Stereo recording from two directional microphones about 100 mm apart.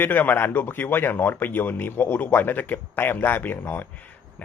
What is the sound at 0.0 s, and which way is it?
Speech, 20° left (ahead or behind).